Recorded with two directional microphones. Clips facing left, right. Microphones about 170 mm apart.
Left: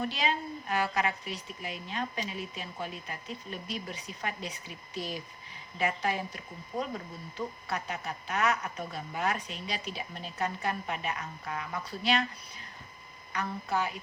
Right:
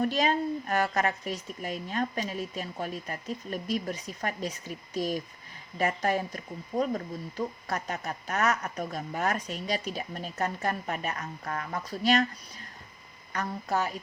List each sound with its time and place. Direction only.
0.0 s speech: 45° right (ahead or behind)
13.3 s a woman's voice: 40° right (ahead or behind)